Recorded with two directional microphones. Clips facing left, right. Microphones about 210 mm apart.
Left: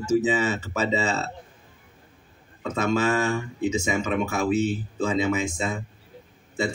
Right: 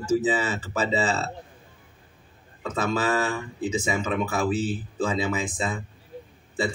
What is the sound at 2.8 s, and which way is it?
Speech, 35° right (ahead or behind).